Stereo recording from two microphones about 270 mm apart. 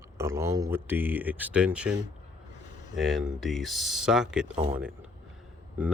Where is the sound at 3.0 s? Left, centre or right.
Centre.